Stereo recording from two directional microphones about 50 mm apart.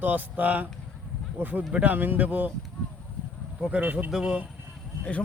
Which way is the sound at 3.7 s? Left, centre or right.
Right.